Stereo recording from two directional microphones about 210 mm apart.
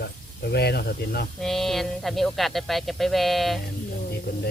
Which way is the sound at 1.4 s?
Centre (ahead or behind).